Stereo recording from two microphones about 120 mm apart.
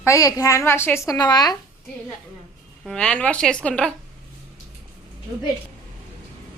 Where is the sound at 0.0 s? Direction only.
25° left (ahead or behind).